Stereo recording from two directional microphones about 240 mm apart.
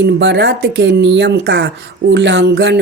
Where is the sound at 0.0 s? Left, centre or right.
Right.